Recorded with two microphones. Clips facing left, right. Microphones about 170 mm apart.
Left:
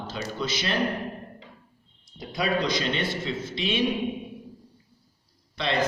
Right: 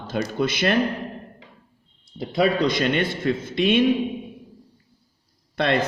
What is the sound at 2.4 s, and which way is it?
A man's voice, 60° right (ahead or behind).